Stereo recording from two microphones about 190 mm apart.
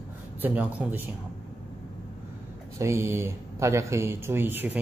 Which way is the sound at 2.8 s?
15° right (ahead or behind).